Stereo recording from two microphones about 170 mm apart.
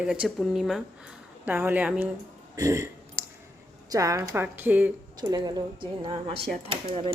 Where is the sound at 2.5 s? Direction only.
20° right (ahead or behind).